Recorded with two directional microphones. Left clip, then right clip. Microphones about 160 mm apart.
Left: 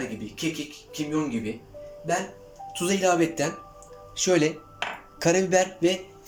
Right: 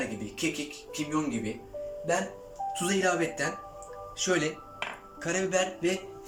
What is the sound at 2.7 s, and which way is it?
Speech, 20° left (ahead or behind).